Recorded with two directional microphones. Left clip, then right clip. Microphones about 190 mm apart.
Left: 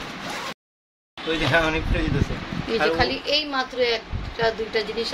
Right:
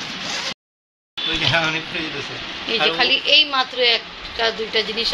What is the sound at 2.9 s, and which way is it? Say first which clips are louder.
A woman's voice: right 7 dB; 15° right (ahead or behind).